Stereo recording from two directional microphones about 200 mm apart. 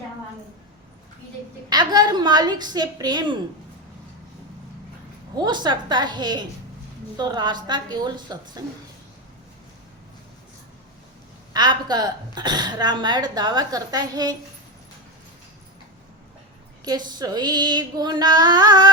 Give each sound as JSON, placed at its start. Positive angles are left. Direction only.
{"t": 1.7, "sound": "a woman's voice", "side_deg": -20}
{"t": 5.4, "sound": "a woman's voice", "side_deg": -20}
{"t": 11.5, "sound": "a woman's voice", "side_deg": -20}
{"t": 17.2, "sound": "a woman's voice", "side_deg": -20}